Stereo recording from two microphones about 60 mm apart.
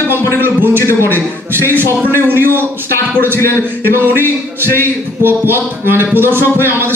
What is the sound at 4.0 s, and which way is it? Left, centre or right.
Speech, right.